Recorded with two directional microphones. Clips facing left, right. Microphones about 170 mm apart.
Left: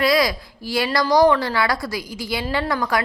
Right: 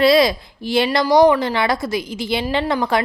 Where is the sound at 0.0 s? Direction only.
25° right (ahead or behind).